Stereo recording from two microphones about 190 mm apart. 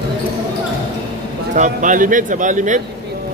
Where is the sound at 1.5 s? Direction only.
40° right (ahead or behind).